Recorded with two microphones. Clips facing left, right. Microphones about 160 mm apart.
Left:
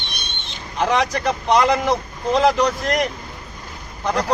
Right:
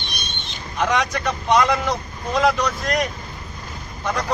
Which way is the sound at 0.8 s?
30° left (ahead or behind).